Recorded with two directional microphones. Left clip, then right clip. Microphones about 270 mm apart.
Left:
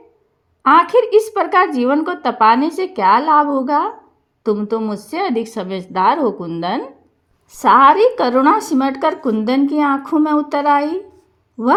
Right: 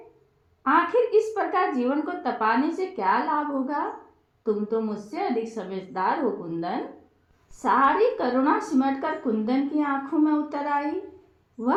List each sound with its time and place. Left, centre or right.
0.6 s a woman's voice: left